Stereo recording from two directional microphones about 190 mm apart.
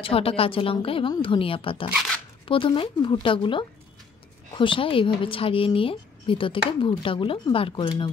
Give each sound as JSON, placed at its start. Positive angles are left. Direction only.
{"t": 0.0, "sound": "a woman's voice", "side_deg": 30}
{"t": 1.9, "sound": "speech", "side_deg": 0}
{"t": 2.4, "sound": "a woman's voice", "side_deg": 25}